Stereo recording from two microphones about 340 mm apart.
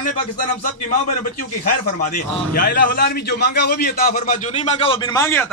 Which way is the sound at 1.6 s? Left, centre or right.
Left.